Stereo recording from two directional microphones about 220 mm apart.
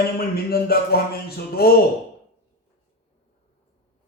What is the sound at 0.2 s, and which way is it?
Speech, 45° left (ahead or behind).